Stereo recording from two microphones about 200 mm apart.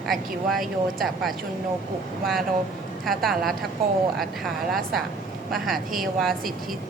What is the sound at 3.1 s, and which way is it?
A woman's voice, centre (ahead or behind).